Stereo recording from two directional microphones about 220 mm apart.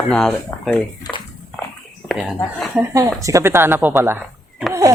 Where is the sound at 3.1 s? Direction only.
15° right (ahead or behind).